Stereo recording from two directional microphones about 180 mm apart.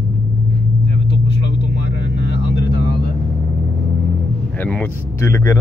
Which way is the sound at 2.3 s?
70° left (ahead or behind).